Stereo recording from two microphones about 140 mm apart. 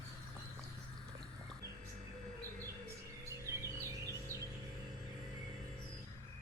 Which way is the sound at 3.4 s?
20° right (ahead or behind).